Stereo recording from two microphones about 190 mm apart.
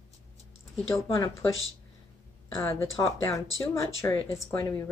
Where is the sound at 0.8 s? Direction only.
15° left (ahead or behind).